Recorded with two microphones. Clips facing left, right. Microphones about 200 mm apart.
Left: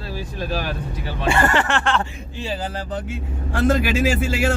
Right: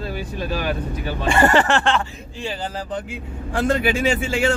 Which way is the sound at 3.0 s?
Centre (ahead or behind).